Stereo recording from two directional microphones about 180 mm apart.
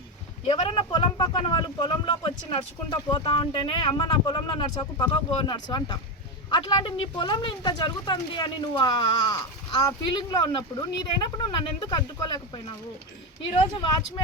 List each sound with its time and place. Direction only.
0.4 s speech: 30° left (ahead or behind)